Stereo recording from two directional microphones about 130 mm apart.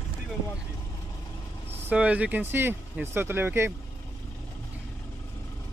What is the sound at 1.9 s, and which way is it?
Speech, 10° right (ahead or behind).